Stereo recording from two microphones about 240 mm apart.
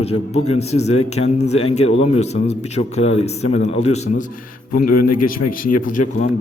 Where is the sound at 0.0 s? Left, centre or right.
Left.